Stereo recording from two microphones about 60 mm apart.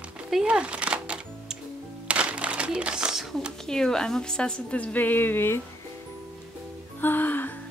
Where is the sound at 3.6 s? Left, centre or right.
Centre; by 5.6 s left.